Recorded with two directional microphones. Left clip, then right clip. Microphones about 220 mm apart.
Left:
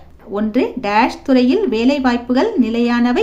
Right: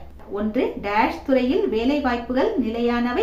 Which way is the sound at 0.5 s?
50° left (ahead or behind).